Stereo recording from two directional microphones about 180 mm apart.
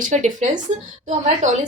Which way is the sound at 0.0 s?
45° right (ahead or behind).